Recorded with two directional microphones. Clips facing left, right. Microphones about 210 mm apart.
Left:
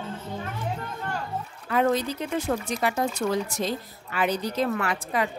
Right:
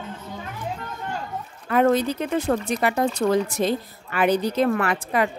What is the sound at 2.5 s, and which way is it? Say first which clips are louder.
A woman's voice: right 4 dB; 65° right (ahead or behind).